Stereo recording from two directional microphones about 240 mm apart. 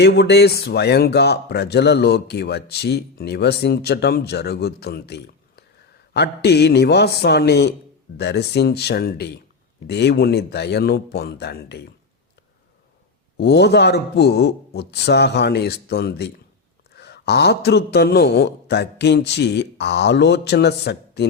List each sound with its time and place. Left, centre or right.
0.0 s speech: left
13.3 s speech: left